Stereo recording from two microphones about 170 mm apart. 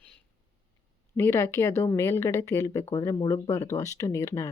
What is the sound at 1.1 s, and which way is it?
Speech, 15° left (ahead or behind).